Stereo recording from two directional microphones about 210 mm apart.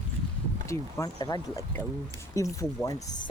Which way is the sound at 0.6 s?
15° left (ahead or behind).